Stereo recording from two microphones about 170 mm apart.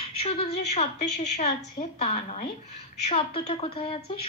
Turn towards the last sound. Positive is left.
turn(degrees=35)  # may be behind; listen again after turning